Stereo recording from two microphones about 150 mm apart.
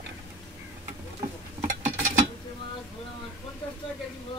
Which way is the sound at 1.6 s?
60° right (ahead or behind).